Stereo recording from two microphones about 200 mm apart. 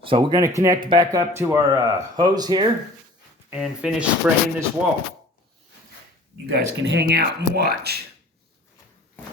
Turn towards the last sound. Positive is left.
turn(degrees=-55)  # may be behind; listen again after turning